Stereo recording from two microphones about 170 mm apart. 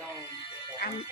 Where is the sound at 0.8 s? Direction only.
70° left (ahead or behind).